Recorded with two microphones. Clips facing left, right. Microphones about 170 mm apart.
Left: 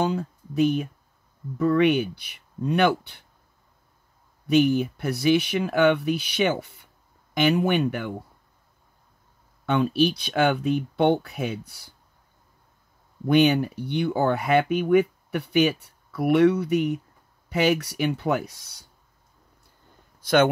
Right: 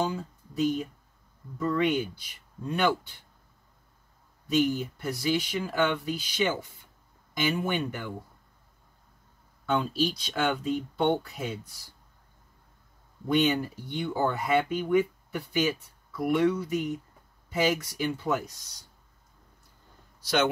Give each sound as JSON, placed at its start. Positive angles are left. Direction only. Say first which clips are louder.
{"t": 0.0, "sound": "speech", "louder": "left 5 dB", "side_deg": 70}
{"t": 4.5, "sound": "speech", "louder": "left 6 dB", "side_deg": 65}
{"t": 9.7, "sound": "speech", "louder": "left 6 dB", "side_deg": 65}
{"t": 13.3, "sound": "speech", "louder": "left 6 dB", "side_deg": 70}
{"t": 20.2, "sound": "a sound", "louder": "left 7 dB", "side_deg": 55}